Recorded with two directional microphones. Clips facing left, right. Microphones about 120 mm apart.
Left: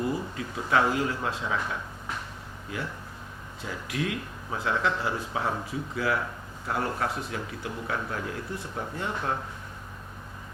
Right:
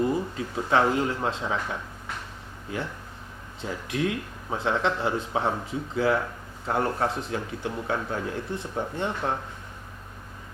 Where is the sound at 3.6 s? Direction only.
30° right (ahead or behind).